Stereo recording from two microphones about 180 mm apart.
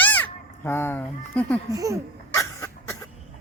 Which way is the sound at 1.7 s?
20° right (ahead or behind).